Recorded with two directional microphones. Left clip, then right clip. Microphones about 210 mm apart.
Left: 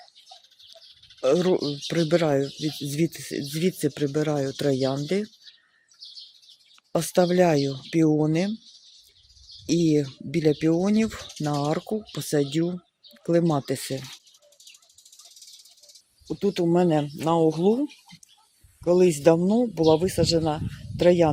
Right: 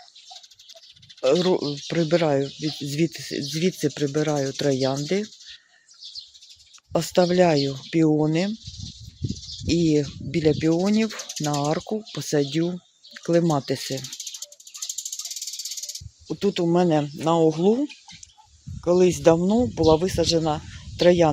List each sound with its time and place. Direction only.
1.2 s speech: 10° left (ahead or behind)
6.9 s speech: 5° left (ahead or behind)
9.6 s speech: 10° left (ahead or behind)
14.3 s cricket: 55° right (ahead or behind)
16.2 s speech: 5° left (ahead or behind)